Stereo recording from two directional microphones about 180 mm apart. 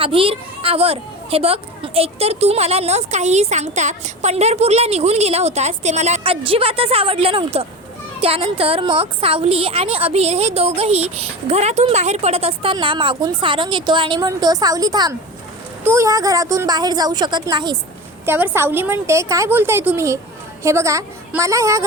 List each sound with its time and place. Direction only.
0.0 s a child's voice: 30° right (ahead or behind)
18.3 s a woman's voice: 10° right (ahead or behind)